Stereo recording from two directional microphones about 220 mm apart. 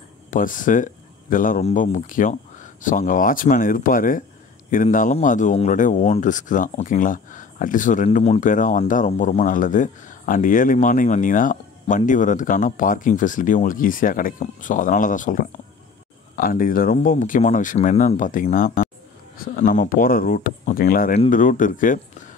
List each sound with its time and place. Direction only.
0.3 s speech: 35° left (ahead or behind)